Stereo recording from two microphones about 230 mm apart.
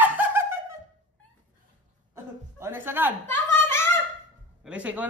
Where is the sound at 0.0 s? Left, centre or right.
Centre.